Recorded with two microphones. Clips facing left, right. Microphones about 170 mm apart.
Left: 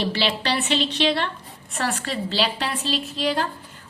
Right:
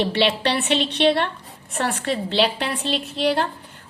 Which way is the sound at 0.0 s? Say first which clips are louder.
Right 4 dB; 60° right (ahead or behind).